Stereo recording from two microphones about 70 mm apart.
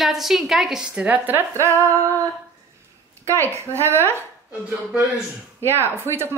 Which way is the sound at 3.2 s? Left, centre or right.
Right.